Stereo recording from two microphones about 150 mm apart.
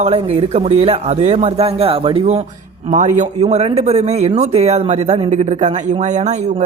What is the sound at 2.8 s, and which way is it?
Speech, 55° right (ahead or behind).